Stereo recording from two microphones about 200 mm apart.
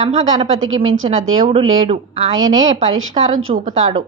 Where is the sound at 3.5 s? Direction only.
40° right (ahead or behind).